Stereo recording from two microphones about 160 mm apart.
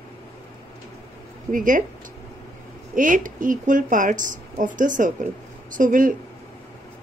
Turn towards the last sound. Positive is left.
turn(degrees=-55)  # may be behind; listen again after turning